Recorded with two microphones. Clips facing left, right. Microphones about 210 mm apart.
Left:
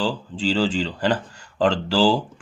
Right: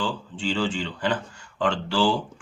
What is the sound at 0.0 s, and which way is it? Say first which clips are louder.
Speech: left 5 dB; 35° left (ahead or behind).